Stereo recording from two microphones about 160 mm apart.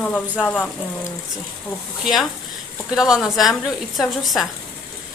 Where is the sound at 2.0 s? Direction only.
Centre (ahead or behind).